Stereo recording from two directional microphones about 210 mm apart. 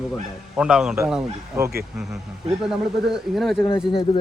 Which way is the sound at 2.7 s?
Centre (ahead or behind).